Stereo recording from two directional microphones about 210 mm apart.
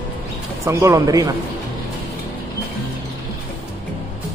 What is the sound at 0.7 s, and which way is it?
Speech, 15° right (ahead or behind).